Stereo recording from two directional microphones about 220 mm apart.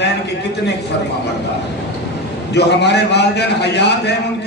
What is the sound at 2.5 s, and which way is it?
A man's voice, 50° left (ahead or behind).